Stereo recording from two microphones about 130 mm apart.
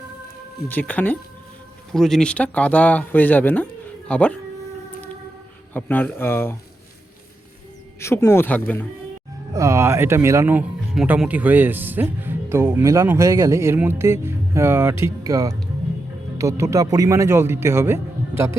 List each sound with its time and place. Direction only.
0.7 s speech: 15° left (ahead or behind)
5.7 s speech: 15° left (ahead or behind)
7.9 s speech: 20° left (ahead or behind)
9.5 s speech: 25° right (ahead or behind)